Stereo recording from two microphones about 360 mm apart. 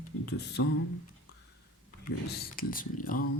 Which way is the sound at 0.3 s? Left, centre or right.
Left.